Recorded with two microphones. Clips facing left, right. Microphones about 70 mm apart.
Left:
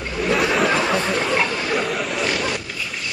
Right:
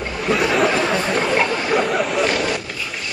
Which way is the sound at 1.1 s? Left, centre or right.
Centre.